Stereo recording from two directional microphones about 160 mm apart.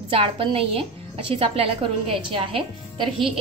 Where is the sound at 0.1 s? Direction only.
35° right (ahead or behind).